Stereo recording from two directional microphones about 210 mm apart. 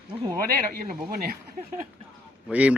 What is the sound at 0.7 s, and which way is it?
Speech, 45° right (ahead or behind).